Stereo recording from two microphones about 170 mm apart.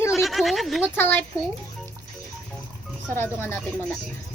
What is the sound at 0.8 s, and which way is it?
Speech, 10° left (ahead or behind).